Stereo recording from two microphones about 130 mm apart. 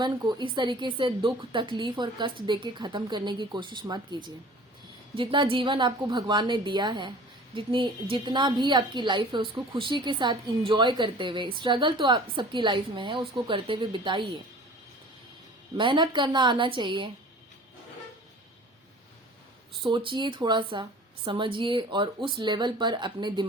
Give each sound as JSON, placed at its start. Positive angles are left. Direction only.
{"t": 0.0, "sound": "a woman's voice", "side_deg": -35}
{"t": 15.8, "sound": "a woman's voice", "side_deg": -40}
{"t": 19.8, "sound": "a woman's voice", "side_deg": -40}